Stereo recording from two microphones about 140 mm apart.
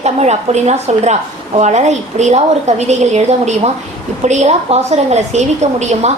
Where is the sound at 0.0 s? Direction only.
50° right (ahead or behind).